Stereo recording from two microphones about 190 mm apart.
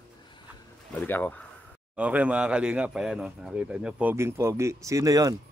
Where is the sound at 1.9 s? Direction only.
5° right (ahead or behind).